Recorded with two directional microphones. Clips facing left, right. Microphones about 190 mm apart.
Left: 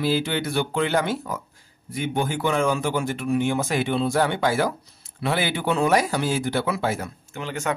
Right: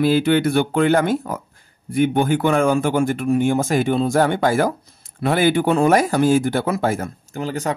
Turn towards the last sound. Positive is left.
turn(degrees=-35)  # may be behind; listen again after turning